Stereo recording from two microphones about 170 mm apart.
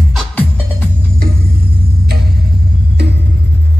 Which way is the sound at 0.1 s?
10° left (ahead or behind).